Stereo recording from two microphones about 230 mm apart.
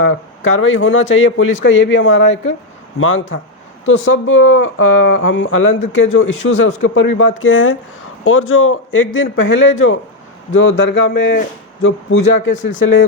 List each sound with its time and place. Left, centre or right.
0.0 s speech: left